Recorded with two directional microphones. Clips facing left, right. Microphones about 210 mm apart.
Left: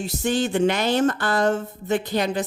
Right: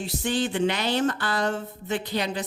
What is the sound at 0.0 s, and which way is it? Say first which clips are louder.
Speech: left 3 dB; 45° left (ahead or behind).